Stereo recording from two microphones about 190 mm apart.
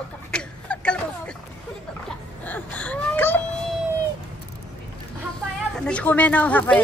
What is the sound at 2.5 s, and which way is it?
Whimper, 10° left (ahead or behind).